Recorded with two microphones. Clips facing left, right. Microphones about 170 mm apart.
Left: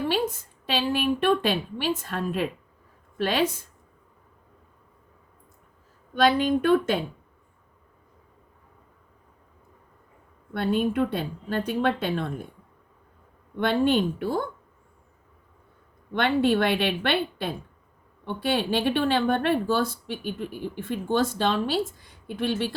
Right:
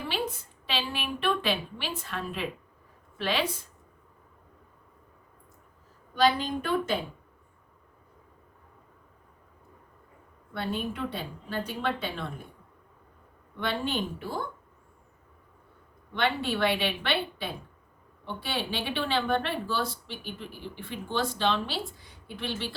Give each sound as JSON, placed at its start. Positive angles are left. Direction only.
{"t": 0.1, "sound": "a woman's voice", "side_deg": 45}
{"t": 6.2, "sound": "speech", "side_deg": 60}
{"t": 10.5, "sound": "a woman's voice", "side_deg": 55}
{"t": 13.6, "sound": "a woman's voice", "side_deg": 55}
{"t": 16.1, "sound": "a woman's voice", "side_deg": 50}